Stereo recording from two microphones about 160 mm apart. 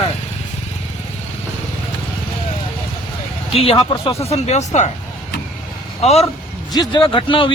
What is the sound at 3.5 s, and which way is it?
A man's voice, 35° left (ahead or behind).